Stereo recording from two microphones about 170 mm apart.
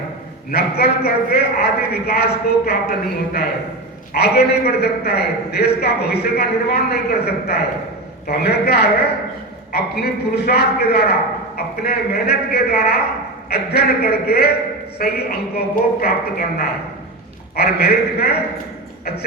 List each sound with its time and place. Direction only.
0.5 s a man's voice: 65° left (ahead or behind)
4.1 s a man's voice: 70° left (ahead or behind)